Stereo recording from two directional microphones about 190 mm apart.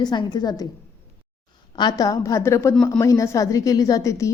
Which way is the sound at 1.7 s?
20° left (ahead or behind).